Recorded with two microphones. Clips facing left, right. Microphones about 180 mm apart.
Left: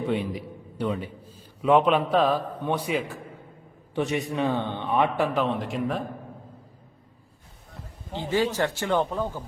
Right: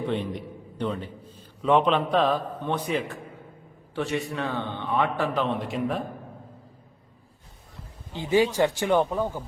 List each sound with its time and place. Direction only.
0.0 s a man's voice: 10° left (ahead or behind)
5.4 s speech: centre (ahead or behind)
8.3 s speech: 15° right (ahead or behind)